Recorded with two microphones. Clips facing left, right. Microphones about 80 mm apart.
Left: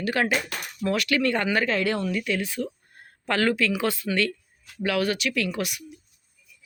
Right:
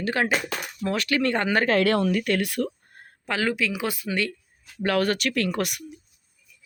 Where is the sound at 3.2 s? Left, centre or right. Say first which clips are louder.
Left 2 dB; centre.